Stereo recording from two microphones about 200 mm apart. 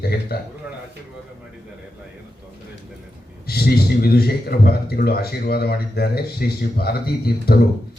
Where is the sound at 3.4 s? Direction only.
50° left (ahead or behind).